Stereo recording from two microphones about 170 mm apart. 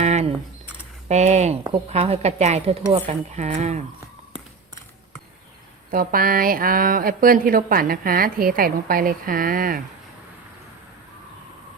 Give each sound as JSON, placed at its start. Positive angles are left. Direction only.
{"t": 0.0, "sound": "camera", "side_deg": -40}
{"t": 1.0, "sound": "speech", "side_deg": -40}
{"t": 5.9, "sound": "speech", "side_deg": -55}